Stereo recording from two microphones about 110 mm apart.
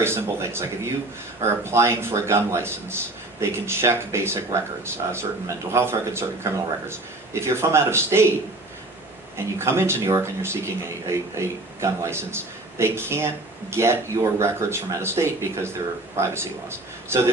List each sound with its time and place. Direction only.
0.0 s speech: 25° right (ahead or behind)
9.6 s speech: 25° right (ahead or behind)